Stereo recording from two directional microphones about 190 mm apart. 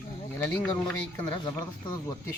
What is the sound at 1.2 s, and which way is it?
Speech, 20° left (ahead or behind).